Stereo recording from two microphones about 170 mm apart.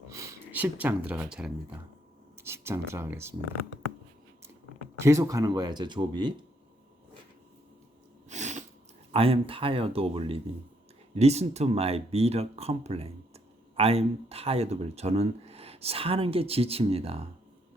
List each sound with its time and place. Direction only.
0.1 s speech: 15° right (ahead or behind)
5.0 s speech: 15° right (ahead or behind)
8.3 s sneeze: 45° right (ahead or behind)
9.1 s speech: 35° right (ahead or behind)